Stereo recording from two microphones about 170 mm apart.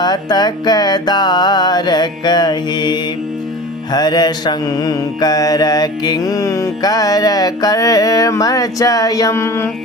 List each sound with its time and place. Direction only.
0.0 s mantra: 25° left (ahead or behind)